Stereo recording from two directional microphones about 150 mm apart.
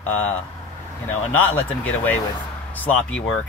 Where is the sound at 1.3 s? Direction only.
15° left (ahead or behind).